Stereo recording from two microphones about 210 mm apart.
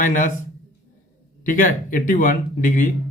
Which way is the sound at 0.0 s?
40° left (ahead or behind).